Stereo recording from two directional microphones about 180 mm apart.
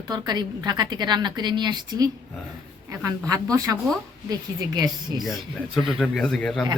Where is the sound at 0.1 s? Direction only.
20° right (ahead or behind).